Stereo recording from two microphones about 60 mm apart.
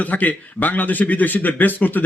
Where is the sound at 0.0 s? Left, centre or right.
Left.